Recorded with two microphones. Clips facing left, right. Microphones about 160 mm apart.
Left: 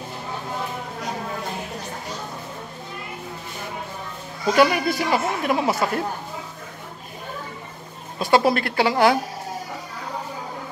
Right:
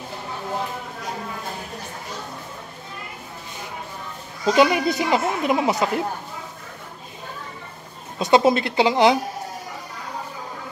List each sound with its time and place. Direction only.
4.5 s speech: 20° right (ahead or behind)
8.2 s speech: 20° right (ahead or behind)